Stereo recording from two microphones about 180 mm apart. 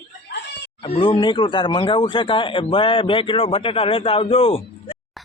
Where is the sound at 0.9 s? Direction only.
25° left (ahead or behind).